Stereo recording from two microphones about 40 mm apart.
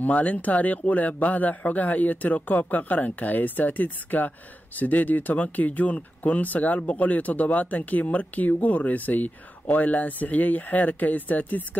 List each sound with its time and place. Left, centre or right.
0.0 s speech: left